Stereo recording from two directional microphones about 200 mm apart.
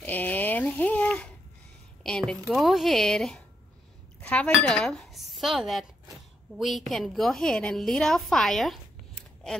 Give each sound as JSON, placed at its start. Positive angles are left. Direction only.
{"t": 0.0, "sound": "a sound", "side_deg": 10}
{"t": 2.0, "sound": "a woman's voice", "side_deg": 5}
{"t": 6.9, "sound": "a woman's voice", "side_deg": 0}